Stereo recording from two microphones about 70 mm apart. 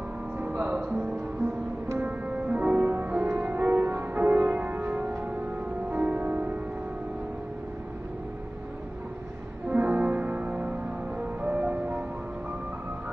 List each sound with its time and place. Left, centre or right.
0.4 s music: right
9.7 s music: right